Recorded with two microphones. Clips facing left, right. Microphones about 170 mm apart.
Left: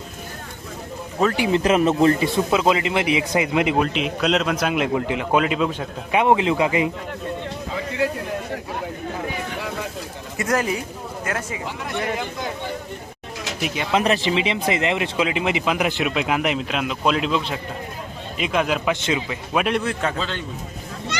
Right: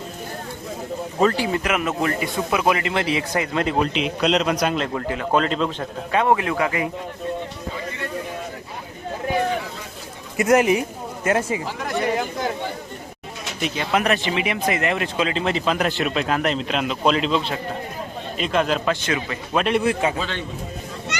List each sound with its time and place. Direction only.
1.4 s speech: 25° left (ahead or behind)
3.8 s speech: centre (ahead or behind)
4.7 s speech: 15° left (ahead or behind)
10.3 s speech: 20° right (ahead or behind)
13.6 s speech: 5° left (ahead or behind)
13.9 s speech: 25° left (ahead or behind)
18.9 s speech: 20° left (ahead or behind)
19.5 s speech: centre (ahead or behind)
19.8 s a man's voice: 10° right (ahead or behind)